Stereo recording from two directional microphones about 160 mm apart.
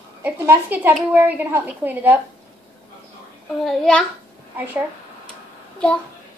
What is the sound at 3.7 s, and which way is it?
Speech, 5° left (ahead or behind).